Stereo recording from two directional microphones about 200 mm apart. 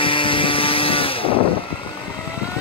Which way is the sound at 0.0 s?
25° left (ahead or behind).